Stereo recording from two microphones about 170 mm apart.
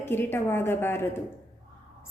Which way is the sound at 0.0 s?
10° left (ahead or behind).